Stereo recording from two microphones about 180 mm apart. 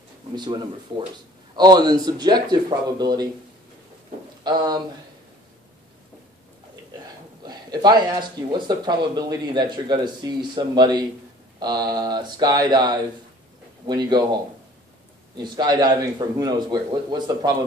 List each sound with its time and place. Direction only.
0.4 s speech: 25° right (ahead or behind)
4.4 s speech: 25° right (ahead or behind)
7.4 s speech: 25° right (ahead or behind)
15.3 s speech: 25° right (ahead or behind)